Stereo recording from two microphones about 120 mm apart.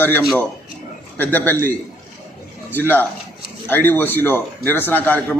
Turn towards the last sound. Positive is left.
turn(degrees=15)  # may be behind; listen again after turning